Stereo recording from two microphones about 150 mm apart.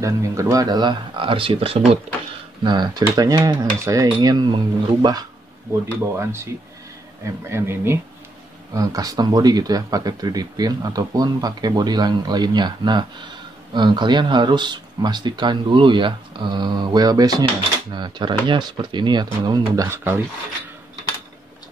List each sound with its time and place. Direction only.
0.0 s speech: 20° right (ahead or behind)
5.7 s speech: 15° right (ahead or behind)